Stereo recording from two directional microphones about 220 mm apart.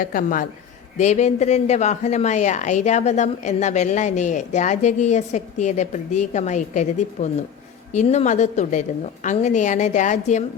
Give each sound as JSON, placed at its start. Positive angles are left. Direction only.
{"t": 0.0, "sound": "speech", "side_deg": 40}